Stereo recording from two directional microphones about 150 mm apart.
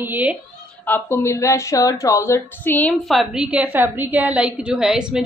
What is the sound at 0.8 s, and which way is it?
Speech, 15° left (ahead or behind).